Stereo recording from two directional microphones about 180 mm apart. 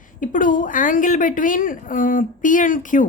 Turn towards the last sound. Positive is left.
turn(degrees=45)  # may be behind; listen again after turning